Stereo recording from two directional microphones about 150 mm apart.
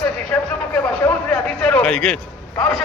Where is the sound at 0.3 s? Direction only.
10° left (ahead or behind).